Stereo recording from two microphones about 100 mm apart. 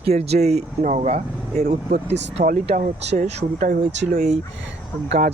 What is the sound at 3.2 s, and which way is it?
Speech, 90° right.